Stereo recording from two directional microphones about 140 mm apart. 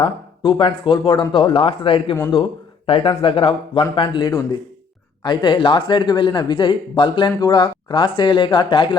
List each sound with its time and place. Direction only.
0.0 s speech: 35° left (ahead or behind)